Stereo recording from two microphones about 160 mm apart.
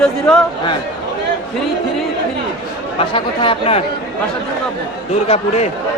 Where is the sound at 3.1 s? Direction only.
35° left (ahead or behind).